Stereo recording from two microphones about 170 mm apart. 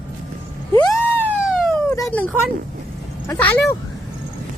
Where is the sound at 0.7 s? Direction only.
20° left (ahead or behind).